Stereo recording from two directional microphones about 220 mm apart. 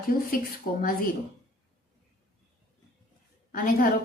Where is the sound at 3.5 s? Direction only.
40° left (ahead or behind).